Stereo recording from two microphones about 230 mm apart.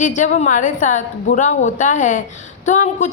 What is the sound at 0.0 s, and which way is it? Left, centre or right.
A woman's voice, left.